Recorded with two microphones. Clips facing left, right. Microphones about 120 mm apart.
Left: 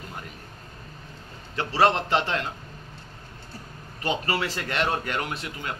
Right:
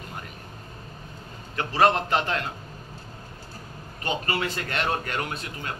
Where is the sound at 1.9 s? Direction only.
25° left (ahead or behind).